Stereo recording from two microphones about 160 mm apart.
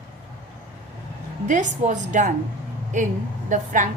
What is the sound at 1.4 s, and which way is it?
Speech, 50° right (ahead or behind).